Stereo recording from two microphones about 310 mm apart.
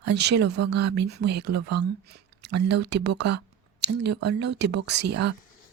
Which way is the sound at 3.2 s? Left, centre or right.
Right.